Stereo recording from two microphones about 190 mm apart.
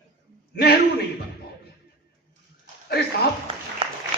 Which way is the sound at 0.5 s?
55° left (ahead or behind).